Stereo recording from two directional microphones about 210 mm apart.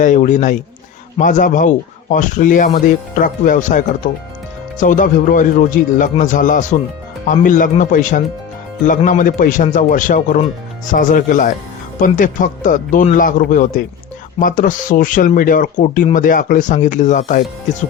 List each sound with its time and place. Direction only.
0.0 s speech: 35° left (ahead or behind)